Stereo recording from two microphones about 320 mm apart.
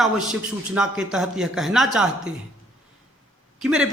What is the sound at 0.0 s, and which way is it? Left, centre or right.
A man's voice, centre.